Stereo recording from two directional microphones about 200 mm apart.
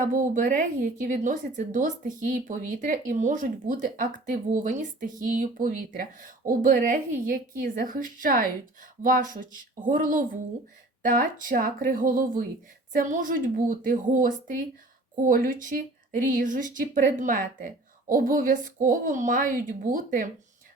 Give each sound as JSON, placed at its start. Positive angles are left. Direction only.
{"t": 0.0, "sound": "speech", "side_deg": -40}